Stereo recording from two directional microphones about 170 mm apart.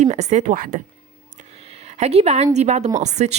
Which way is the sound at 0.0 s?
40° right (ahead or behind).